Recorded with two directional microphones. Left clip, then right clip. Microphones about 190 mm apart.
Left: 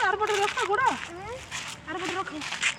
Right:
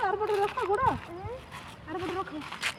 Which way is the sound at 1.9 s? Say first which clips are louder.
Left 2 dB; 30° left (ahead or behind).